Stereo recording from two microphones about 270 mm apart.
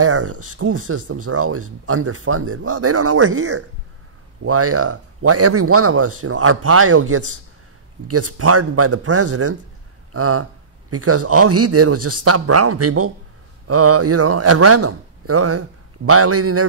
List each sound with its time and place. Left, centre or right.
0.0 s speech: right